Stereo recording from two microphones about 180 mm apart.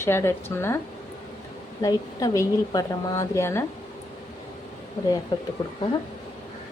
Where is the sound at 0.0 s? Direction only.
15° left (ahead or behind).